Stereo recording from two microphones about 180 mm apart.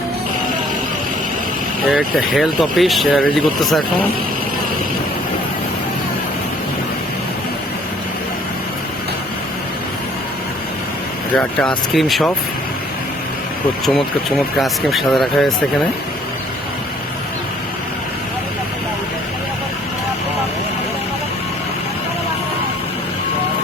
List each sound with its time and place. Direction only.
1.9 s speech: centre (ahead or behind)
11.9 s speech: centre (ahead or behind)
13.8 s speech: centre (ahead or behind)